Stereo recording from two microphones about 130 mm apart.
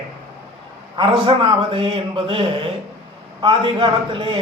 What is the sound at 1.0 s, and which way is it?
Speech, 40° right (ahead or behind).